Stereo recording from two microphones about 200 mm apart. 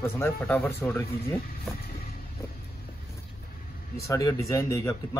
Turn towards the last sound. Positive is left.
turn(degrees=15)  # may be behind; listen again after turning